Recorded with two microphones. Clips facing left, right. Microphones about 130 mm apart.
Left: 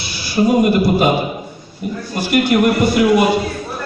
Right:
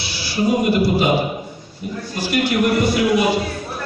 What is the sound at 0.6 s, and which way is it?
Speech, 50° left (ahead or behind).